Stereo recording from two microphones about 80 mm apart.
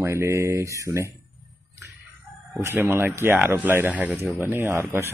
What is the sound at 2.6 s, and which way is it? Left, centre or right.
Speech, right.